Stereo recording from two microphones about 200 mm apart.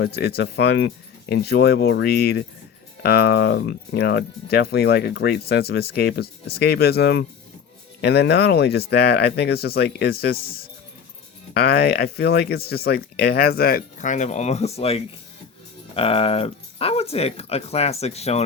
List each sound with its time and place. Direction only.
0.0 s speech: 55° left (ahead or behind)
11.5 s speech: 50° left (ahead or behind); by 18.4 s 30° left (ahead or behind)